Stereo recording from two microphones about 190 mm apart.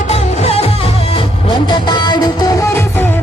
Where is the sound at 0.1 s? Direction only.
30° left (ahead or behind).